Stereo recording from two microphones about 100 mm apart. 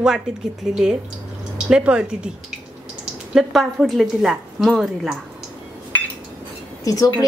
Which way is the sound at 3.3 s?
5° right (ahead or behind).